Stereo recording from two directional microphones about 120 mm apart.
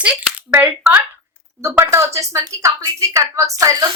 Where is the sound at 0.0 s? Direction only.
15° right (ahead or behind).